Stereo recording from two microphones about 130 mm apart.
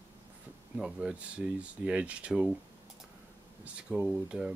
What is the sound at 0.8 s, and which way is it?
Speech, 5° right (ahead or behind).